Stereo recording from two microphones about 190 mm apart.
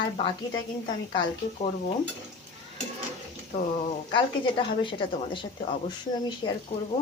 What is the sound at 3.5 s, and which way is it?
A woman's voice, 35° left (ahead or behind).